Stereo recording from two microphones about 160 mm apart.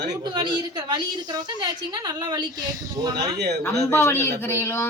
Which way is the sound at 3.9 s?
15° left (ahead or behind).